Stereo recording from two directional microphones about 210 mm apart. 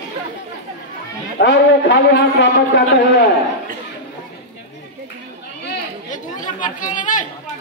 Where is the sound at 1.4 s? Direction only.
60° left (ahead or behind).